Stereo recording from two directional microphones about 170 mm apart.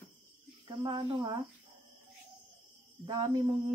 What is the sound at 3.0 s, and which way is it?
Speech, 30° right (ahead or behind).